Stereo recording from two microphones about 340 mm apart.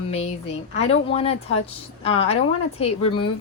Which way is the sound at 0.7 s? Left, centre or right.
Centre.